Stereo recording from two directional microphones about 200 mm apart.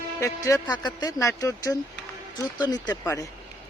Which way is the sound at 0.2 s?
15° left (ahead or behind).